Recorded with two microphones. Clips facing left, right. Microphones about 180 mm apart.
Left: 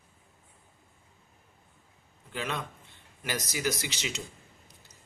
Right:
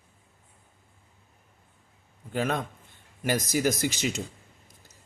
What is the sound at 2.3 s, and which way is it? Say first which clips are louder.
Speech: right 7 dB; 45° right (ahead or behind).